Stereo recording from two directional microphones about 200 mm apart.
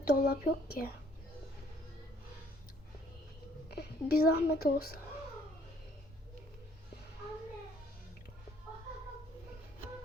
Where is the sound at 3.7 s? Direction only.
50° left (ahead or behind).